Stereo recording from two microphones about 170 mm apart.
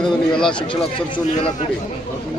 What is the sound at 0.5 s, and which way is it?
Speech, 30° left (ahead or behind).